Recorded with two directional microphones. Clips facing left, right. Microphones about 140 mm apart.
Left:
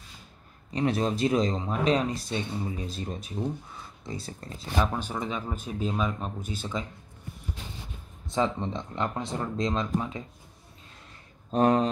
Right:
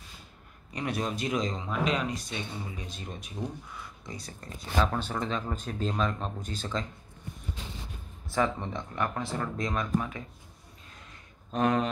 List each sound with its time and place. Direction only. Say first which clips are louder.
0.7 s speech: left 6 dB; 30° left (ahead or behind)
4.7 s speech: even; 10° left (ahead or behind)
8.3 s speech: left 1 dB; 20° left (ahead or behind)
11.5 s speech: left 4 dB; 35° left (ahead or behind)